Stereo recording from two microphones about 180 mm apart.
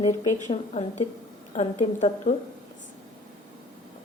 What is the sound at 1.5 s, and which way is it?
Speech, 40° left (ahead or behind).